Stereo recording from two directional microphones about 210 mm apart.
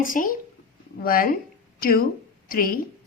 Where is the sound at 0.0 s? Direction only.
40° left (ahead or behind).